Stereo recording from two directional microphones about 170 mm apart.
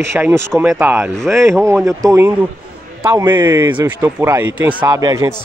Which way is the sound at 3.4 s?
15° right (ahead or behind).